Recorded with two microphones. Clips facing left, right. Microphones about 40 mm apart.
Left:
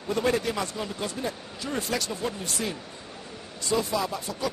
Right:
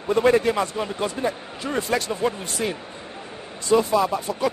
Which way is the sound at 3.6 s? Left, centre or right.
Right.